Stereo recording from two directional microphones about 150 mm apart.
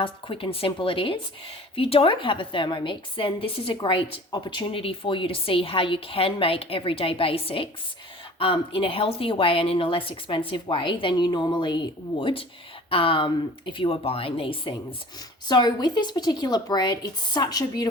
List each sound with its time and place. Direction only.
0.0 s a woman's voice: 35° left (ahead or behind)